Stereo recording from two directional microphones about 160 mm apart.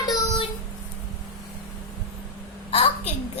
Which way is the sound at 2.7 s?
40° left (ahead or behind).